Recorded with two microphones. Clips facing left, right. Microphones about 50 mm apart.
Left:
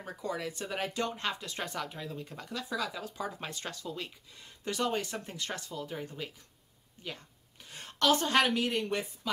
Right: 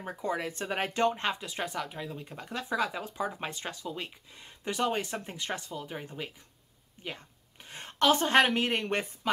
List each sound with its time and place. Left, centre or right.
0.0 s a woman's voice: right